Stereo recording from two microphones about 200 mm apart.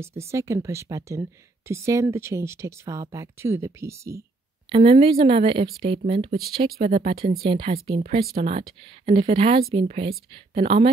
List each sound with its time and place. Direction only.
0.0 s speech: 15° right (ahead or behind)
4.6 s speech: 30° right (ahead or behind)